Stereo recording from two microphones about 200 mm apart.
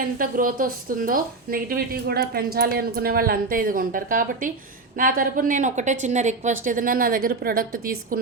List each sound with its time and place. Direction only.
0.0 s a woman's voice: 45° right (ahead or behind)